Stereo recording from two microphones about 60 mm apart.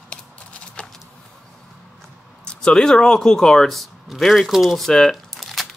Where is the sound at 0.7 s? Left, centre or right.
Centre.